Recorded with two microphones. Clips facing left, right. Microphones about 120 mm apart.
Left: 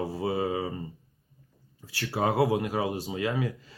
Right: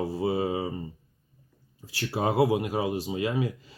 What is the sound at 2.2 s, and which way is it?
Speech, 25° right (ahead or behind).